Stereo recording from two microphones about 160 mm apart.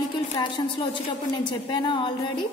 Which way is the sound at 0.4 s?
25° left (ahead or behind).